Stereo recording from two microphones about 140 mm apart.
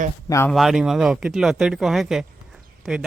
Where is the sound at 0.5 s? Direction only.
Centre (ahead or behind).